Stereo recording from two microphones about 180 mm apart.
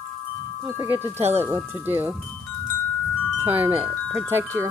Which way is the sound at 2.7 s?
10° left (ahead or behind).